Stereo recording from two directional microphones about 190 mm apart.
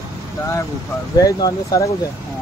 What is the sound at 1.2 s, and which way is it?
Speech, 15° left (ahead or behind).